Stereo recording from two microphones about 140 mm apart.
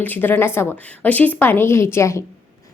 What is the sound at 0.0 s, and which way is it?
A woman's voice, 15° left (ahead or behind).